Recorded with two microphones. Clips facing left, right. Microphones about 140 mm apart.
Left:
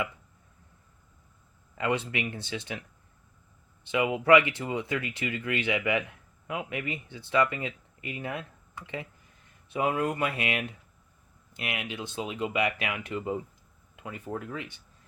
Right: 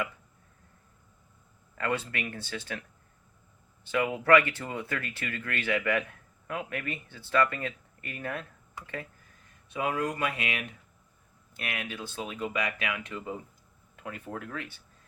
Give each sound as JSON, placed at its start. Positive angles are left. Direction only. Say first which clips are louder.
{"t": 1.8, "sound": "speech", "louder": "left 2 dB", "side_deg": 15}
{"t": 3.8, "sound": "speech", "louder": "left 2 dB", "side_deg": 15}
{"t": 9.6, "sound": "speech", "louder": "left 3 dB", "side_deg": 25}
{"t": 13.9, "sound": "speech", "louder": "left 2 dB", "side_deg": 5}